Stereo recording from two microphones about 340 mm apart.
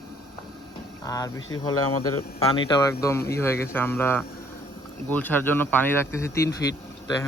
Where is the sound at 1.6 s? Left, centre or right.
Left.